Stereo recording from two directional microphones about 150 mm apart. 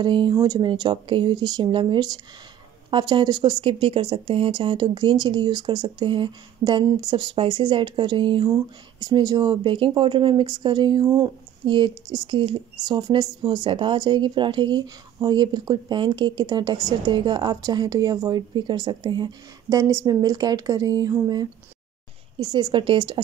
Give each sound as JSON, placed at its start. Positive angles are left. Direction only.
{"t": 0.0, "sound": "speech", "side_deg": -30}